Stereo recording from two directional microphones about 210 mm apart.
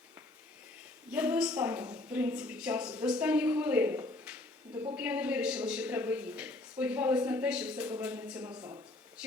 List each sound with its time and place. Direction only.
1.1 s a woman's voice: 5° right (ahead or behind)
8.4 s speech: 20° right (ahead or behind)